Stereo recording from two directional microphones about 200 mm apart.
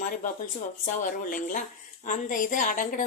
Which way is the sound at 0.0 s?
40° left (ahead or behind).